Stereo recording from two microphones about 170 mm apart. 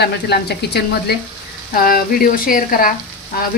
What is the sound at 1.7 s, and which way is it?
Cutlery, 60° left (ahead or behind).